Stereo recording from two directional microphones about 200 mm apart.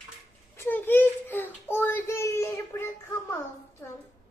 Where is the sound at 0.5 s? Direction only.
10° left (ahead or behind).